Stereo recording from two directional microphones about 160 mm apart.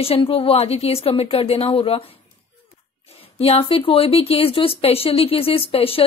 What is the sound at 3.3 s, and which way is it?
Speech, 40° left (ahead or behind).